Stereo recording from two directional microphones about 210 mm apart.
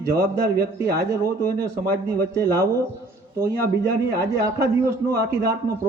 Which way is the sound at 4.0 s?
15° right (ahead or behind).